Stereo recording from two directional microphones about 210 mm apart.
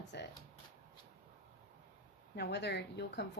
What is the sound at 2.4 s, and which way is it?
Speech, 55° left (ahead or behind).